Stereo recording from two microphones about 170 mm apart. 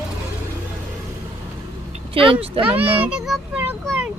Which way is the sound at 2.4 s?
35° right (ahead or behind).